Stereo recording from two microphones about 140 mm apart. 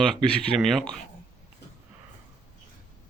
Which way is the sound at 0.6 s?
5° left (ahead or behind).